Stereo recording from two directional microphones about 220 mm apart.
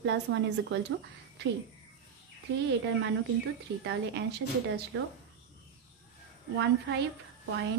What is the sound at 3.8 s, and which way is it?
Speech, 50° right (ahead or behind).